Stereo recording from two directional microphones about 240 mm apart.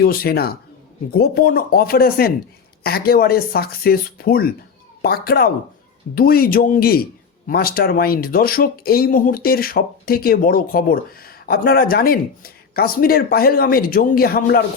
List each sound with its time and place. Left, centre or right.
0.0 s speech: left